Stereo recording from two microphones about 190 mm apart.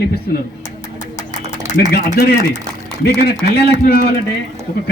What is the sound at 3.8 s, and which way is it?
Speech, 55° left (ahead or behind).